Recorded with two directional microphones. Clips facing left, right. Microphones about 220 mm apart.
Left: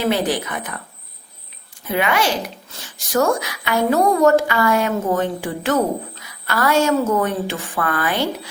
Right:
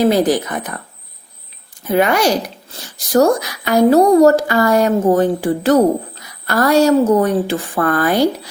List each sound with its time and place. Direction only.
0.0 s a woman's voice: 40° right (ahead or behind)
1.9 s a woman's voice: 40° right (ahead or behind)